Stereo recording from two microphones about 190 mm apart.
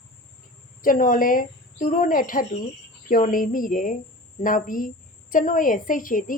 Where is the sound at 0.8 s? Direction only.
45° left (ahead or behind).